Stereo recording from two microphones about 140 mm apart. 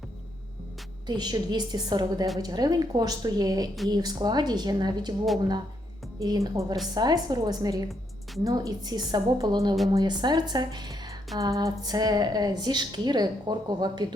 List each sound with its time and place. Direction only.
1.0 s a woman's voice: 30° right (ahead or behind)
6.1 s a woman's voice: 25° right (ahead or behind)